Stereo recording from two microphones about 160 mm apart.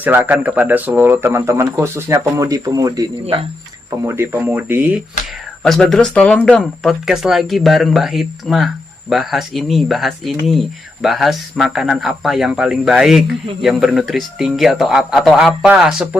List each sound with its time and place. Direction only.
0.0 s speech: 10° right (ahead or behind)
5.6 s speech: centre (ahead or behind)